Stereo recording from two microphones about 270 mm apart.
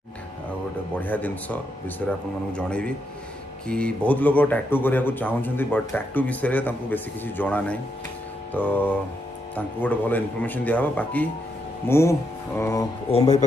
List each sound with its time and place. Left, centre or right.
0.9 s speech: centre
13.1 s speech: left